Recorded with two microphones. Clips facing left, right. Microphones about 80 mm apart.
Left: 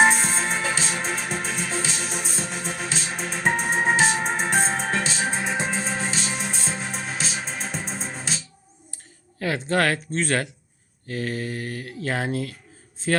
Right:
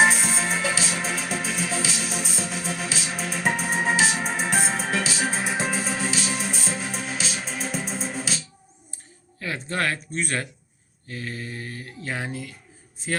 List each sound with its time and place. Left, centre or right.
0.0 s music: centre
9.4 s speech: left
11.1 s speech: left